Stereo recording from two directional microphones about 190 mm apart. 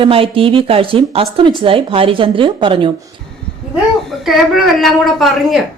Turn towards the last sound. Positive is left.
turn(degrees=0)  # may be behind; listen again after turning